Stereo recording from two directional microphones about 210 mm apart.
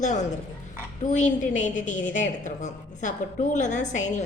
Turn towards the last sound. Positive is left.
turn(degrees=35)  # may be behind; listen again after turning